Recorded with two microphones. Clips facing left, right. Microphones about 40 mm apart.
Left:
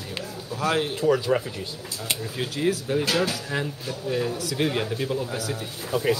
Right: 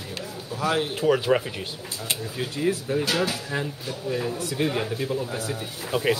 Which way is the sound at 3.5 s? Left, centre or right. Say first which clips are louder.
Left 1 dB; centre.